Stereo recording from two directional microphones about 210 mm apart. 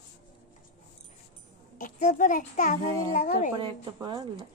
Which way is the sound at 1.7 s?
40° left (ahead or behind).